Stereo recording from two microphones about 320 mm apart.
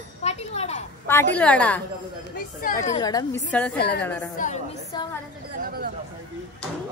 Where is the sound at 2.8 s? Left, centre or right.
Centre.